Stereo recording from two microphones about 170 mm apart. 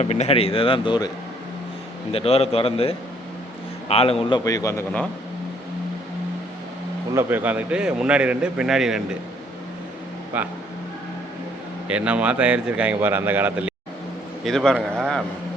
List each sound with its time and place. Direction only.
0.0 s a man's voice: 40° left (ahead or behind)
2.1 s a man's voice: 35° left (ahead or behind)
4.4 s speech: 20° left (ahead or behind)
7.1 s a man's voice: 15° right (ahead or behind)
10.3 s a man's voice: 10° right (ahead or behind)
11.9 s a man's voice: 5° right (ahead or behind)
14.4 s a man's voice: 5° left (ahead or behind)